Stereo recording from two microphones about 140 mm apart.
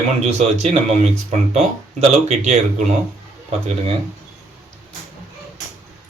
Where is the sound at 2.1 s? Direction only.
50° right (ahead or behind).